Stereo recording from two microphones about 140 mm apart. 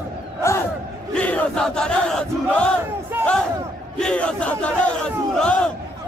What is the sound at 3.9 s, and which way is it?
Speech, 5° left (ahead or behind).